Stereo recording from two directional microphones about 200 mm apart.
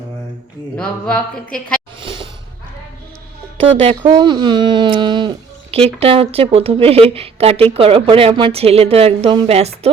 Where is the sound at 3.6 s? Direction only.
30° right (ahead or behind).